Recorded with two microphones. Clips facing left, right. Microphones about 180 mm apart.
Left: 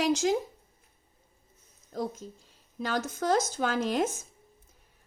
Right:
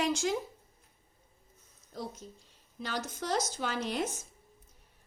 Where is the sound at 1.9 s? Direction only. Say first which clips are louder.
Left 7 dB; 45° left (ahead or behind).